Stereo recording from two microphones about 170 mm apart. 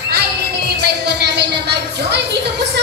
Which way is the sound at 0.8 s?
75° right (ahead or behind).